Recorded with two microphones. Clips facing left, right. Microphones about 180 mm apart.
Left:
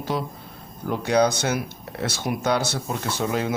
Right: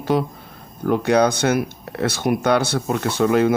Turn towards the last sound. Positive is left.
turn(degrees=-60)  # may be behind; listen again after turning